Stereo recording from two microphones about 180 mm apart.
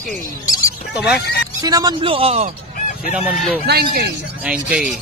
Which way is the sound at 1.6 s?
20° right (ahead or behind).